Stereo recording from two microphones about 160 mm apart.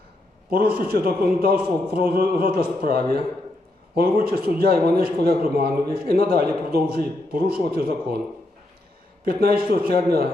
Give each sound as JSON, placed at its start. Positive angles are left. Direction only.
{"t": 0.5, "sound": "a man's voice", "side_deg": -70}
{"t": 9.2, "sound": "a man's voice", "side_deg": -70}